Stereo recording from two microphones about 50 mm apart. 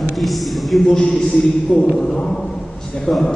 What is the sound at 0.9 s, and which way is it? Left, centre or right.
A man's voice, left.